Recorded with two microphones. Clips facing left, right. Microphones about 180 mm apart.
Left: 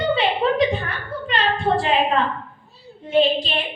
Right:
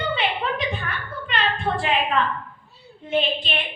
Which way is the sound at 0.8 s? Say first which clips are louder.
Left 3 dB; 35° left (ahead or behind).